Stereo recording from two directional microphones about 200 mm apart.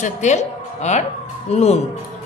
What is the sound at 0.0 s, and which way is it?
Speech, 35° left (ahead or behind).